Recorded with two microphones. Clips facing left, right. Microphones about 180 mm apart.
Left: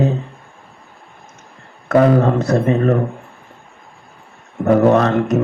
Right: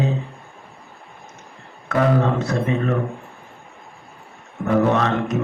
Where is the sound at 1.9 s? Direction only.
40° left (ahead or behind).